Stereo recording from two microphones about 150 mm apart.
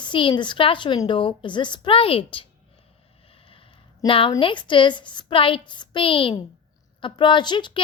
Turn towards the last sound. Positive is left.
turn(degrees=30)  # may be behind; listen again after turning